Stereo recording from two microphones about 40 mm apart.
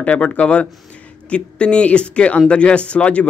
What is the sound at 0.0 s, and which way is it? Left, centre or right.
Speech, left.